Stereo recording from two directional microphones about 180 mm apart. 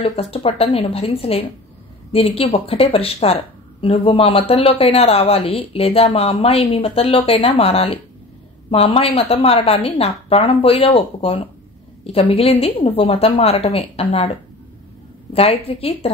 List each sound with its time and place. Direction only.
0.0 s a woman's voice: 30° left (ahead or behind)
15.3 s a woman's voice: 30° left (ahead or behind)